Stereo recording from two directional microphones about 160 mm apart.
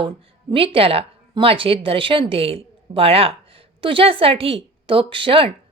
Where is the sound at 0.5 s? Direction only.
35° right (ahead or behind).